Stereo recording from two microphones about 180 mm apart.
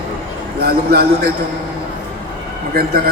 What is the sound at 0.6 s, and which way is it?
Speech, 60° right (ahead or behind).